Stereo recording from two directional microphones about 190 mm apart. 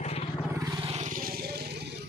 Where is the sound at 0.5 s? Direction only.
20° right (ahead or behind).